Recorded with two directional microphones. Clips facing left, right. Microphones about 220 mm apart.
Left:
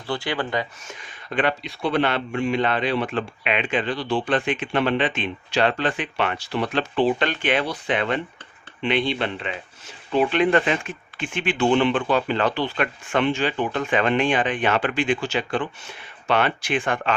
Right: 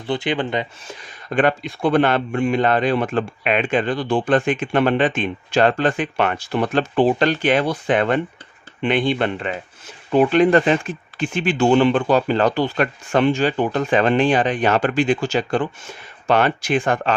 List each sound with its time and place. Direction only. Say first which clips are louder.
0.1 s speech: right 4 dB; 20° right (ahead or behind)
1.3 s a man's voice: right 5 dB; 45° right (ahead or behind)